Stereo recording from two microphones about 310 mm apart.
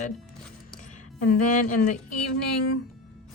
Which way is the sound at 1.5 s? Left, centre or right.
Left.